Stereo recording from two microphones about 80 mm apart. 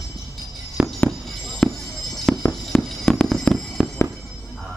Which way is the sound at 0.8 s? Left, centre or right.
Centre.